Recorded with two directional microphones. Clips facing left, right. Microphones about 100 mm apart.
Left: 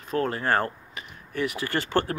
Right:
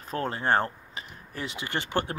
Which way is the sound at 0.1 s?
30° right (ahead or behind).